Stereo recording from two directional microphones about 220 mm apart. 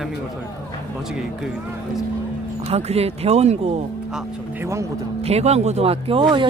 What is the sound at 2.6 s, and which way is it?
Speech, 30° right (ahead or behind).